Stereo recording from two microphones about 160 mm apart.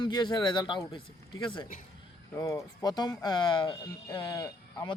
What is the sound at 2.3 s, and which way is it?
Speech, 20° left (ahead or behind).